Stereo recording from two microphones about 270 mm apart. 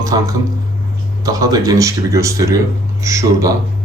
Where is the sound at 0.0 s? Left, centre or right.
Centre.